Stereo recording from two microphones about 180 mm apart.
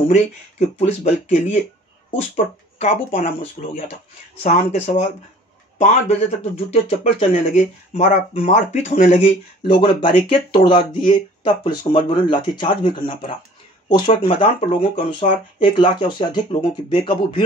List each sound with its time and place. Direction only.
0.1 s speech: 40° left (ahead or behind)